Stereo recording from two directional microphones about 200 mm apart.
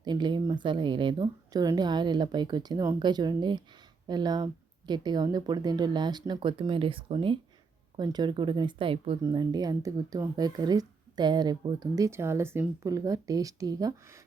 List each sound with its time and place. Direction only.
0.0 s a woman's voice: 20° right (ahead or behind)